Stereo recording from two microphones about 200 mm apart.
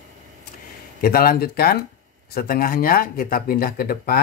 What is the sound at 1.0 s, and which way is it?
Speech, 50° left (ahead or behind).